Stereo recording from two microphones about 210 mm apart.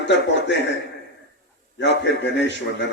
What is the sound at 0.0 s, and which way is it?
Speech, 55° left (ahead or behind).